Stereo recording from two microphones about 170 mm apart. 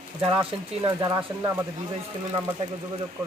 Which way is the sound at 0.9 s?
20° right (ahead or behind).